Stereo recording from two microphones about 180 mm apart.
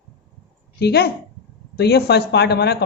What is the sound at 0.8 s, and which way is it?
Speech, 60° left (ahead or behind).